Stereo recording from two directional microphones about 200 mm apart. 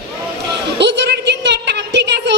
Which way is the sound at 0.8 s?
60° right (ahead or behind).